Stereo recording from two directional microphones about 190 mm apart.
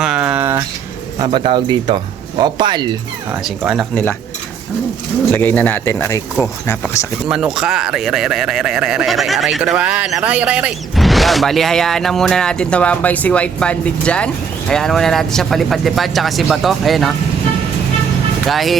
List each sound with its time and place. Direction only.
0.0 s a sound: 5° right (ahead or behind)
1.2 s speech: 25° right (ahead or behind)
3.4 s speech: 5° right (ahead or behind)
5.3 s speech: 10° left (ahead or behind)
7.3 s speech: 5° right (ahead or behind)
18.4 s speech: centre (ahead or behind)